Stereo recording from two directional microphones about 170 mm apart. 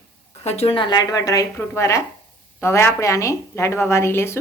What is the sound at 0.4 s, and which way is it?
A woman's voice, 35° left (ahead or behind).